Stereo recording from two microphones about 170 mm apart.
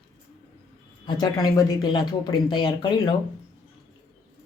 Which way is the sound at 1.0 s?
25° left (ahead or behind).